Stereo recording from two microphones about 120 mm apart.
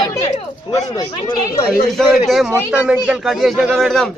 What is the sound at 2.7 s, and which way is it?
Speech, 10° right (ahead or behind).